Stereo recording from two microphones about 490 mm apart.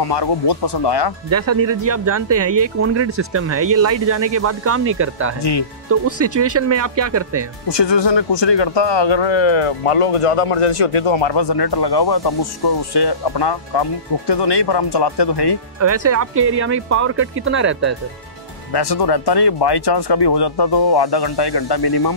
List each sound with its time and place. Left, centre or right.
0.0 s speech: left
1.3 s speech: right
5.4 s speech: left
5.9 s speech: right
7.6 s speech: left
15.8 s speech: right
18.7 s speech: left